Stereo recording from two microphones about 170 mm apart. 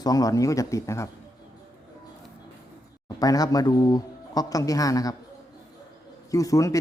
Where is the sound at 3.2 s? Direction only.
20° left (ahead or behind).